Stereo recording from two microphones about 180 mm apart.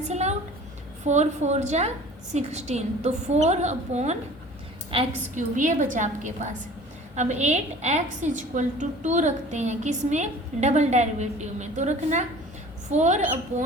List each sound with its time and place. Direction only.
0.1 s a woman's voice: 40° right (ahead or behind)
5.3 s a woman's voice: 45° right (ahead or behind)